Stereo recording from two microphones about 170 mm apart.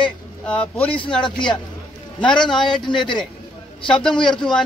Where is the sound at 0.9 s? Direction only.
30° left (ahead or behind).